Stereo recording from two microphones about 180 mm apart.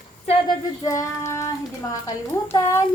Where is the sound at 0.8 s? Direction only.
15° left (ahead or behind).